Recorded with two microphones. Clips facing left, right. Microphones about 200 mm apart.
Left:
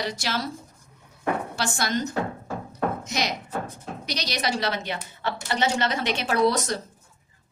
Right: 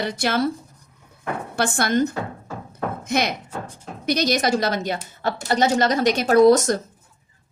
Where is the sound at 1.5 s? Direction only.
55° right (ahead or behind).